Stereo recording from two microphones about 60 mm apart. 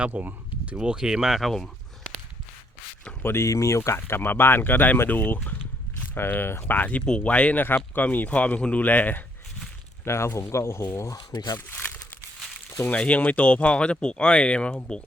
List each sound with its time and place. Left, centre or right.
0.0 s speech: right
0.8 s speech: centre
3.2 s speech: left
6.1 s speech: left
10.0 s speech: left
11.5 s speech: left